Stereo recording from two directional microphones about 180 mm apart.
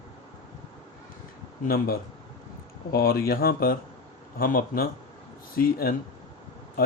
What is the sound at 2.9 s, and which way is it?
Speech, 60° left (ahead or behind).